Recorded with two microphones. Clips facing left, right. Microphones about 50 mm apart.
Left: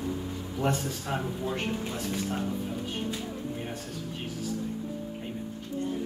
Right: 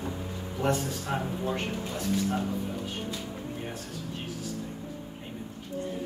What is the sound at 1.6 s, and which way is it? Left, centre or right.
Speech, centre.